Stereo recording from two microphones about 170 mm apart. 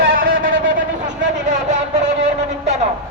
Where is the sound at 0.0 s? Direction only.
60° right (ahead or behind).